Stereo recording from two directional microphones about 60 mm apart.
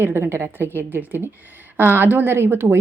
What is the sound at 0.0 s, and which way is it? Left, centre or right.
A woman's voice, right.